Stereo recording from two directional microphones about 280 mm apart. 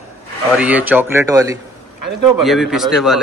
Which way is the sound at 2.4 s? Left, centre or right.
Centre.